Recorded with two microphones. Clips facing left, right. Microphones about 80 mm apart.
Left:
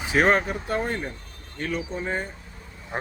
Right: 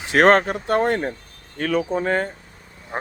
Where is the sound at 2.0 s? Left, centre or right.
Right.